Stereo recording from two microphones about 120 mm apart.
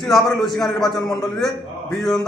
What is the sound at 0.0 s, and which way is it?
A man's voice, centre (ahead or behind).